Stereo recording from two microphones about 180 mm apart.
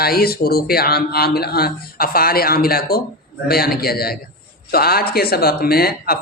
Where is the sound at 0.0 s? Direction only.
60° left (ahead or behind).